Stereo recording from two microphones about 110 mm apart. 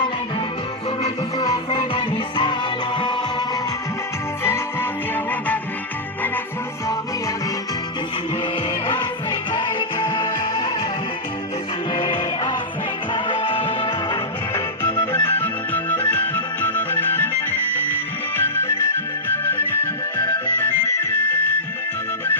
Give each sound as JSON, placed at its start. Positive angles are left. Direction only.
{"t": 1.8, "sound": "music", "side_deg": 45}
{"t": 4.4, "sound": "music", "side_deg": 20}
{"t": 8.9, "sound": "music", "side_deg": 45}
{"t": 11.9, "sound": "music", "side_deg": 50}
{"t": 14.9, "sound": "music", "side_deg": 20}